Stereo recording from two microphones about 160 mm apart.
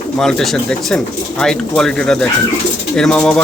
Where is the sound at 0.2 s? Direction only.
5° left (ahead or behind).